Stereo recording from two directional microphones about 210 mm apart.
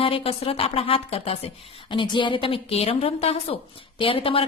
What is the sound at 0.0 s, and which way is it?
A woman's voice, 25° left (ahead or behind).